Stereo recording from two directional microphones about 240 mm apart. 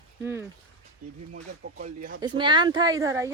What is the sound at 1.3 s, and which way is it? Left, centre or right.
Speech, right.